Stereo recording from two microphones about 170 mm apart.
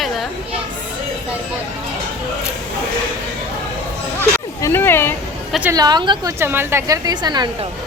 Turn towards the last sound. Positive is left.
turn(degrees=-25)  # may be behind; listen again after turning